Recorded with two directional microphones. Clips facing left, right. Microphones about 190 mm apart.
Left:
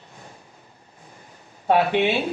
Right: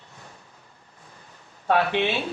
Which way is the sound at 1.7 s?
15° left (ahead or behind).